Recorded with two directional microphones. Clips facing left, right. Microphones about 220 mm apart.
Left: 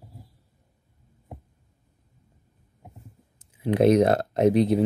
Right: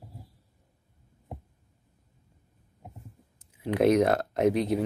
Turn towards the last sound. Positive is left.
turn(degrees=30)  # may be behind; listen again after turning